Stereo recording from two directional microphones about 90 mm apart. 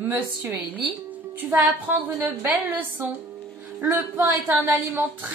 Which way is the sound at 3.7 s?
25° right (ahead or behind).